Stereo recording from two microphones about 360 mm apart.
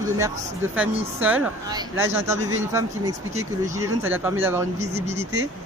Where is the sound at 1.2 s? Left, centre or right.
Centre.